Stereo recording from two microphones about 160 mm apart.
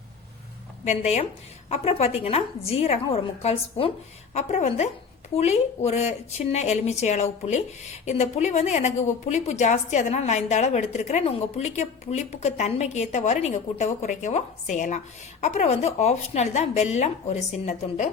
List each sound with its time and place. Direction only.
0.9 s a woman's voice: 45° left (ahead or behind)